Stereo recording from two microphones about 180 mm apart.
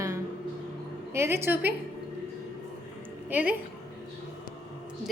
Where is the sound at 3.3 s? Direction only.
10° right (ahead or behind).